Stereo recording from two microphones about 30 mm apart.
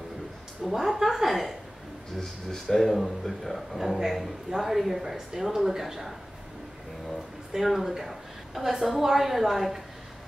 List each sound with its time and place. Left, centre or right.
0.7 s a man's voice: centre
2.1 s speech: centre
2.8 s a man's voice: centre
5.1 s speech: centre
7.6 s a man's voice: centre